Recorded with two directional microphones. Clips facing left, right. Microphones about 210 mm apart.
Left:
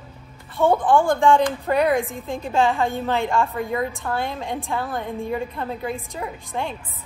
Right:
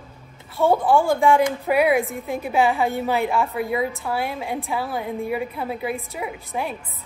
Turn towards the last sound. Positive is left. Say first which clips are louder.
# right 1 dB
turn(degrees=-10)  # may be behind; listen again after turning